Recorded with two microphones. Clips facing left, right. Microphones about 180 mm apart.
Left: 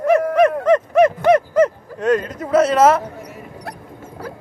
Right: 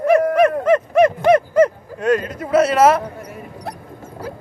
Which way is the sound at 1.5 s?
10° right (ahead or behind).